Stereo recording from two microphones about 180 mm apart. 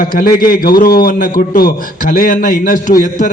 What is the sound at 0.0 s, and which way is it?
A man's voice, 50° left (ahead or behind).